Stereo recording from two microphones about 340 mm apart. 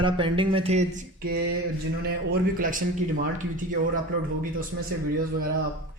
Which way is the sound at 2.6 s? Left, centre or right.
Right.